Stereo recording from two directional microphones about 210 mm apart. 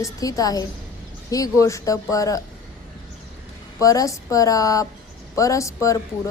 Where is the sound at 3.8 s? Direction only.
15° left (ahead or behind).